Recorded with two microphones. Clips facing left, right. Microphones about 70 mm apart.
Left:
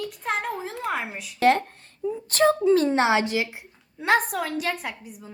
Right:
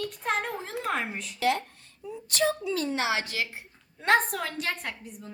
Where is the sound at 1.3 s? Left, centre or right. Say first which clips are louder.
Left 7 dB; left; by 3.7 s centre.